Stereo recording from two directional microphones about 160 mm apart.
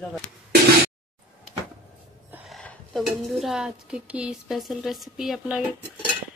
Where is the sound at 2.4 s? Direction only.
Centre (ahead or behind).